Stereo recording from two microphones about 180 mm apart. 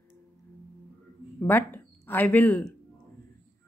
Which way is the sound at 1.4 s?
10° left (ahead or behind).